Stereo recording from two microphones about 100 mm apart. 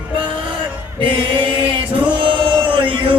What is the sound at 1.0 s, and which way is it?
Chant, 55° right (ahead or behind).